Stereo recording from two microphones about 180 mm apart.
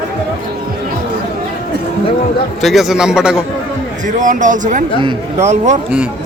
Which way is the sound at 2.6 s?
Centre (ahead or behind).